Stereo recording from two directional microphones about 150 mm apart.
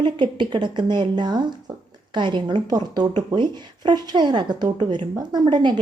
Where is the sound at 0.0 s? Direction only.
30° right (ahead or behind).